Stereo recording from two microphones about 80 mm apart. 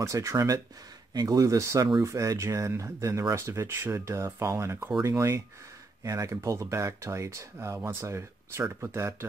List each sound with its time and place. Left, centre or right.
0.0 s speech: right